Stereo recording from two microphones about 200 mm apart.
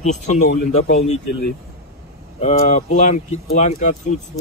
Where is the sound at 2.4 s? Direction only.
35° left (ahead or behind).